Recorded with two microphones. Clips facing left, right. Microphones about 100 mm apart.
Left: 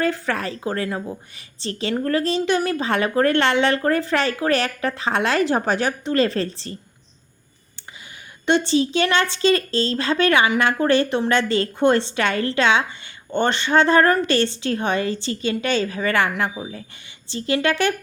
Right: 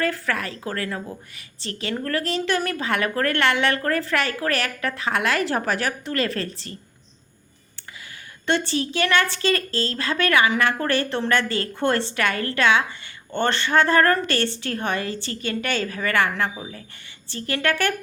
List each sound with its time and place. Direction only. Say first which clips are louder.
0.0 s speech: left 2 dB; 25° left (ahead or behind)
8.4 s speech: left 5 dB; 20° left (ahead or behind)